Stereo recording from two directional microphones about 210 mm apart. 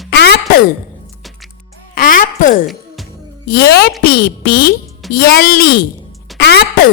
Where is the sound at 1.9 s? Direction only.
40° left (ahead or behind).